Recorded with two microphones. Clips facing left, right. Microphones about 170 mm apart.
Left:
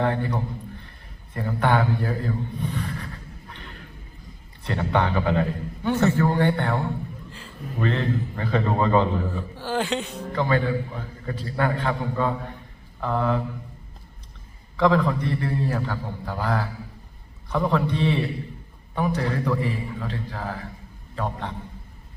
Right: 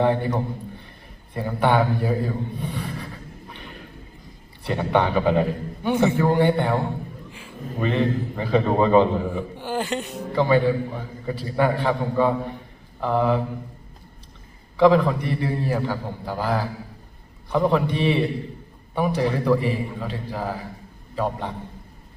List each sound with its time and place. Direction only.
0.0 s a man's voice: 15° right (ahead or behind)
4.6 s a man's voice: 15° right (ahead or behind)
14.8 s a man's voice: 15° right (ahead or behind)